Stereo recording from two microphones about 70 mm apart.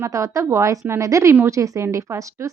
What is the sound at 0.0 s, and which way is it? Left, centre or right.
A woman's voice, right.